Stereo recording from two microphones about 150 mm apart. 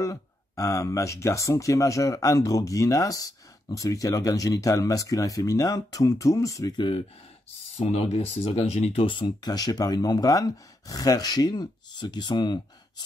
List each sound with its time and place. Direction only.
0.0 s speech: 20° left (ahead or behind)
7.8 s speech: 40° left (ahead or behind)